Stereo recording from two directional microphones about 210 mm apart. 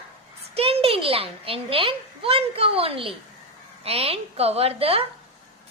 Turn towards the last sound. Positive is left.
turn(degrees=-30)  # may be behind; listen again after turning